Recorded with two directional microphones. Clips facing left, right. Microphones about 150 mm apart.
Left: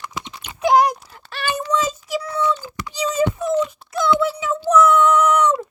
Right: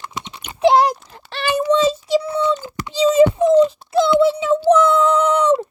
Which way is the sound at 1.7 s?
30° right (ahead or behind).